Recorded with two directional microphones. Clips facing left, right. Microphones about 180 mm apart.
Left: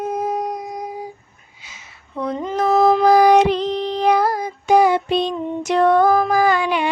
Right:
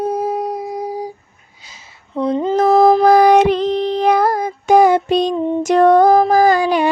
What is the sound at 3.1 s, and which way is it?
Female singing, 55° right (ahead or behind).